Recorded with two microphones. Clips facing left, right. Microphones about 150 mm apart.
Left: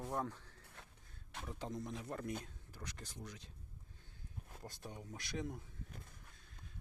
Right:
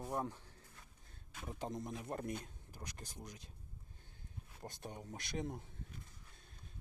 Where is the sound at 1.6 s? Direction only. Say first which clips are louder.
Right 2 dB; 20° right (ahead or behind).